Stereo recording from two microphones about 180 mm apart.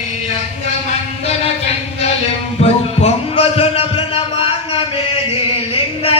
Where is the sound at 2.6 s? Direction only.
35° left (ahead or behind).